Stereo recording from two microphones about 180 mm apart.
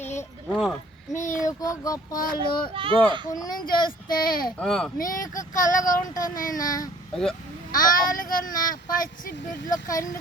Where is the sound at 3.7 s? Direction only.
50° left (ahead or behind).